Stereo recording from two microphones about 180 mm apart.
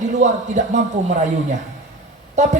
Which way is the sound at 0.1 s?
40° right (ahead or behind).